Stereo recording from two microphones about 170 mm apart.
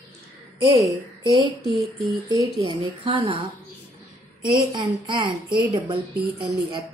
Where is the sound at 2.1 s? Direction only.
25° right (ahead or behind).